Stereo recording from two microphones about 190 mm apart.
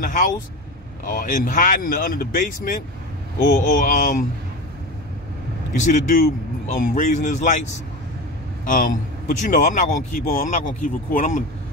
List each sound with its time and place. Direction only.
0.0 s speech: 45° left (ahead or behind)
5.7 s speech: 40° left (ahead or behind)
8.6 s a man's voice: 45° left (ahead or behind)